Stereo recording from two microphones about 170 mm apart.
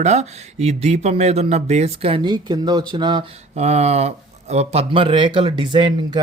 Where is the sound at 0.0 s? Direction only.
40° right (ahead or behind); by 3.2 s 25° right (ahead or behind).